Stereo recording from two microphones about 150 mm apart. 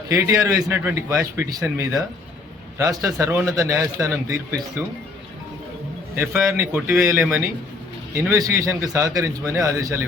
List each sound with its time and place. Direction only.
0.1 s a man's voice: 20° right (ahead or behind)
6.1 s a man's voice: 15° right (ahead or behind)